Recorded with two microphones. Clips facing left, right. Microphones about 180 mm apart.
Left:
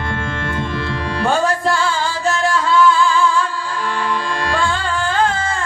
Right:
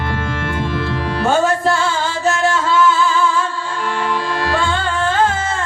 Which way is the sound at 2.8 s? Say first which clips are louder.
Left 2 dB; 5° right (ahead or behind).